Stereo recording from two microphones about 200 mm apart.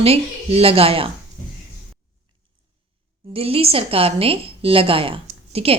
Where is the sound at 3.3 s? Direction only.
30° right (ahead or behind).